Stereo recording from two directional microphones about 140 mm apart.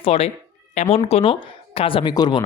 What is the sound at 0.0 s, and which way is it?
Speech, 45° left (ahead or behind).